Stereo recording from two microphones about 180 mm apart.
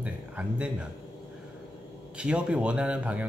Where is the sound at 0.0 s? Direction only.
5° right (ahead or behind).